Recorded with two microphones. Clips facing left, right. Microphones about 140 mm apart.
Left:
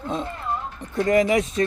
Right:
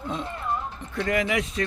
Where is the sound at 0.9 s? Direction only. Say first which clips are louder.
Left 6 dB; 35° left (ahead or behind).